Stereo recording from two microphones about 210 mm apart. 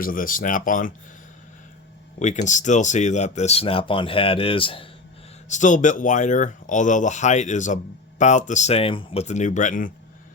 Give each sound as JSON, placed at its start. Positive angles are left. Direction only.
{"t": 0.0, "sound": "speech", "side_deg": 40}
{"t": 2.1, "sound": "speech", "side_deg": 35}
{"t": 5.5, "sound": "speech", "side_deg": 35}